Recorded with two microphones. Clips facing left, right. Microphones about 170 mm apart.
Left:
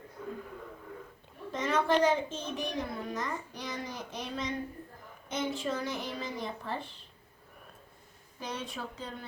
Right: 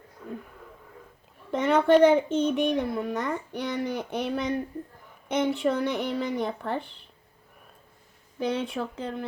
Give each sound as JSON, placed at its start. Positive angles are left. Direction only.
{"t": 0.2, "sound": "a sound", "side_deg": 0}
{"t": 1.5, "sound": "a child's voice", "side_deg": -65}
{"t": 8.4, "sound": "a child's voice", "side_deg": -60}